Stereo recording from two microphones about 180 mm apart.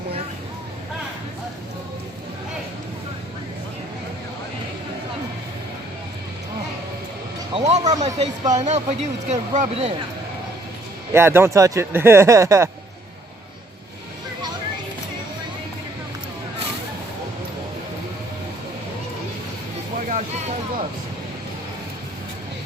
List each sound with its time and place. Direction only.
7.5 s speech: 40° right (ahead or behind)
11.1 s speech: 15° right (ahead or behind)
20.1 s a sound: 40° right (ahead or behind)